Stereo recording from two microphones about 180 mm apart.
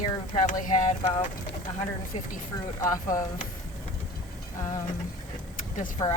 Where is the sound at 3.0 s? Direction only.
50° left (ahead or behind).